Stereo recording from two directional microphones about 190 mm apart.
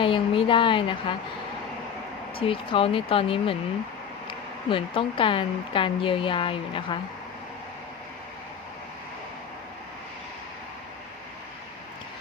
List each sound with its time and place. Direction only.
0.0 s speech: 25° left (ahead or behind)
2.4 s speech: 30° left (ahead or behind)